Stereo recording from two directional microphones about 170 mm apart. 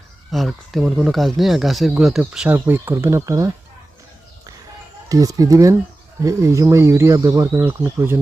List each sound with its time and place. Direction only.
0.3 s speech: centre (ahead or behind); by 3.5 s 15° right (ahead or behind)
5.0 s speech: 20° right (ahead or behind)